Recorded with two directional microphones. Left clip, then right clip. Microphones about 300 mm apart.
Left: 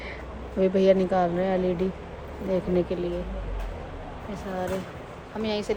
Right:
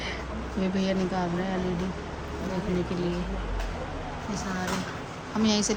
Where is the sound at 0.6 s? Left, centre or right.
Centre.